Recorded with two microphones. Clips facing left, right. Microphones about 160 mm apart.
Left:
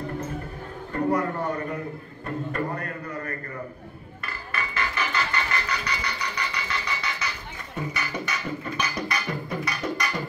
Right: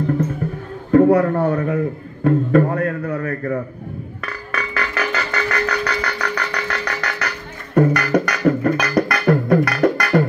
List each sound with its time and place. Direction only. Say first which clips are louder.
0.9 s speech: right 12 dB; 65° right (ahead or behind)
2.2 s a sound: right 14 dB; 65° right (ahead or behind)
4.2 s music: right 5 dB; 90° right; by 10.2 s 65° right (ahead or behind)